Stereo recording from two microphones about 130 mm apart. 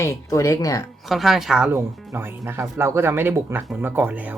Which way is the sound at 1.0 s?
Centre (ahead or behind).